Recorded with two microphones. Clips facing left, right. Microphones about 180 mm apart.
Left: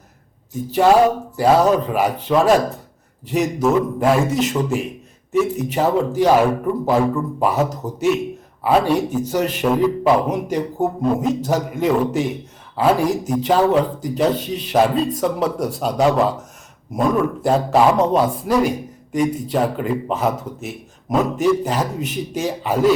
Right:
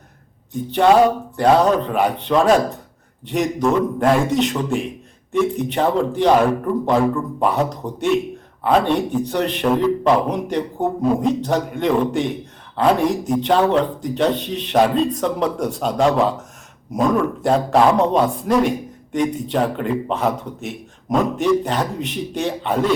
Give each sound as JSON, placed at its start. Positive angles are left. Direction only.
{"t": 0.5, "sound": "speech", "side_deg": 5}